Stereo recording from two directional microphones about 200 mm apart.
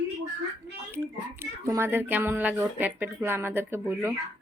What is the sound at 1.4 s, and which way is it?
Speech, 15° right (ahead or behind).